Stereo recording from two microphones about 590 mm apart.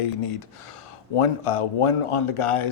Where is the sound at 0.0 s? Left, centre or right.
Left.